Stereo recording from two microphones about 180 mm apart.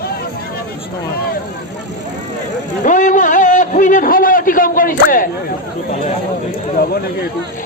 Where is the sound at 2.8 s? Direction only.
45° left (ahead or behind).